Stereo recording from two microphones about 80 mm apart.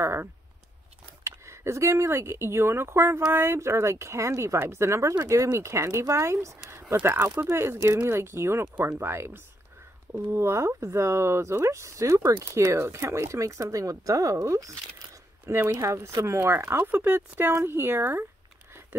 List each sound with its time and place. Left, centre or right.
0.0 s speech: right
6.7 s a sound: right
7.0 s speech: right
15.4 s speech: right